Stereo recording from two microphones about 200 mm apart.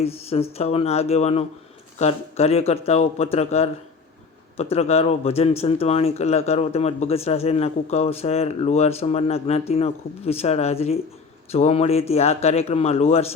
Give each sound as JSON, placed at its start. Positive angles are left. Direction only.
{"t": 0.0, "sound": "speech", "side_deg": 30}